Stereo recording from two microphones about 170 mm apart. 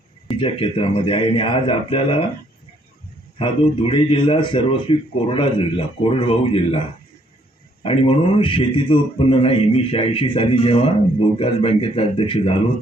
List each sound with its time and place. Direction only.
0.3 s a man's voice: 30° left (ahead or behind)
3.3 s a man's voice: 30° left (ahead or behind)